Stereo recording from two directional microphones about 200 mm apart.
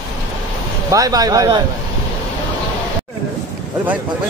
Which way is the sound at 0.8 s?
15° right (ahead or behind).